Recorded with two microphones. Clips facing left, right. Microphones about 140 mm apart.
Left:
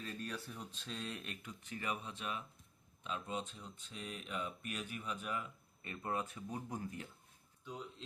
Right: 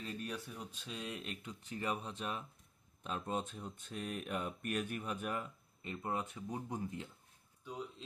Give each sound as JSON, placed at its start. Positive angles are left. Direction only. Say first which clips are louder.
{"t": 0.0, "sound": "speech", "louder": "right 2 dB", "side_deg": -20}
{"t": 5.8, "sound": "speech", "louder": "right 1 dB", "side_deg": -20}
{"t": 7.6, "sound": "speech", "louder": "right 3 dB", "side_deg": -10}